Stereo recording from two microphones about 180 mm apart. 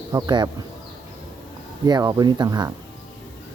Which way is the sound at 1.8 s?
20° right (ahead or behind).